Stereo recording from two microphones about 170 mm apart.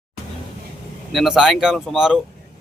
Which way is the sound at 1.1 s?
Centre (ahead or behind).